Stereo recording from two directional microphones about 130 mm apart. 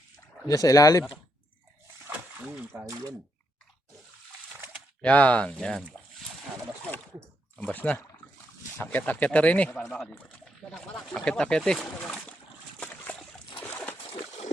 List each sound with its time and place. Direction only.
0.4 s speech: 25° left (ahead or behind)
2.8 s speech: 25° right (ahead or behind)
5.0 s speech: 10° left (ahead or behind)
7.6 s speech: 10° left (ahead or behind)
12.8 s splash: 10° left (ahead or behind)
14.1 s a sound: 50° left (ahead or behind)